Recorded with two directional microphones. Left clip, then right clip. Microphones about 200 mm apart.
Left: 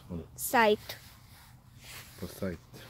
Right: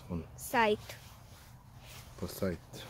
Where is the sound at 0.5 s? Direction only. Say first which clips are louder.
Left 4 dB; 50° left (ahead or behind).